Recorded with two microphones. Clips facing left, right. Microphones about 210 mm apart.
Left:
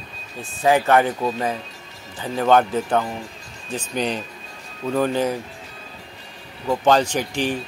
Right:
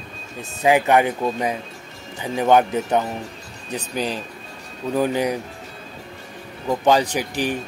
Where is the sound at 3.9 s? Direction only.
5° right (ahead or behind).